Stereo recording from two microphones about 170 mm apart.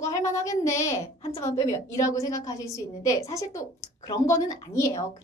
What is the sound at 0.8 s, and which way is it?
A woman's voice, 15° left (ahead or behind).